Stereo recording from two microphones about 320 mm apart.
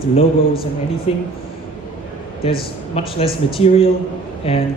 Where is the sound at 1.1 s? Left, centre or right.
Centre.